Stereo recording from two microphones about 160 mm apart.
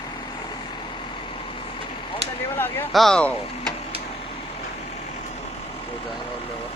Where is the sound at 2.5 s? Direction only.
15° left (ahead or behind).